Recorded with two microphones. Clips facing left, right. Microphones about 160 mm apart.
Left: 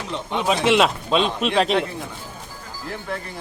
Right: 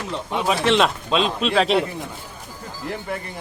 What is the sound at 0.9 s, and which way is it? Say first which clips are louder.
Speech: left 1 dB; centre (ahead or behind).